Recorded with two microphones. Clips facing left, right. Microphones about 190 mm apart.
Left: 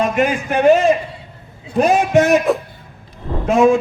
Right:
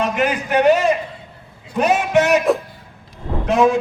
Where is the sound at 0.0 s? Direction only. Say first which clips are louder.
Left 3 dB; 45° left (ahead or behind).